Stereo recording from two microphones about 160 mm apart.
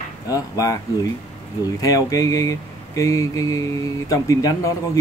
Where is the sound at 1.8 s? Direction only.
20° left (ahead or behind).